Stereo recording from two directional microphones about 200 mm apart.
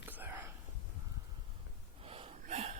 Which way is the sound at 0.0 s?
10° right (ahead or behind).